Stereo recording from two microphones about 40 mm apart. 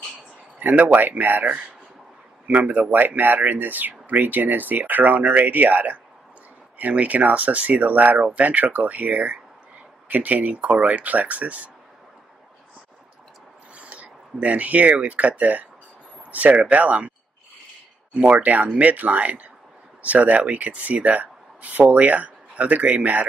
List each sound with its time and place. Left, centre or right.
0.6 s speech: right
2.4 s speech: right
10.5 s speech: right
13.7 s speech: right
18.1 s speech: right